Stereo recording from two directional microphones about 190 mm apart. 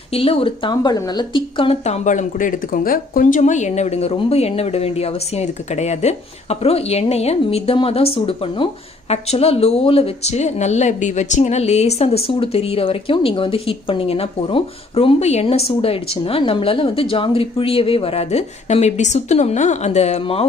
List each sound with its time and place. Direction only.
0.1 s speech: 30° left (ahead or behind)